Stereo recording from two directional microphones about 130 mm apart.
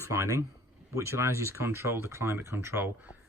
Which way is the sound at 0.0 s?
20° right (ahead or behind).